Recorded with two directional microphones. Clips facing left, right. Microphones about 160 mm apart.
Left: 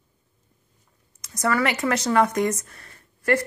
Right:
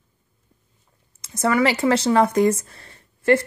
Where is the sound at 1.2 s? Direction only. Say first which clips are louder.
Right 4 dB; 25° right (ahead or behind).